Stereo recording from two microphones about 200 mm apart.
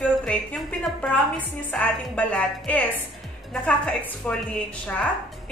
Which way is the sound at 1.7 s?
5° left (ahead or behind).